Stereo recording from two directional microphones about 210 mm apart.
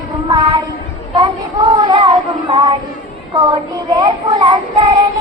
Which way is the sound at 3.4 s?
20° right (ahead or behind).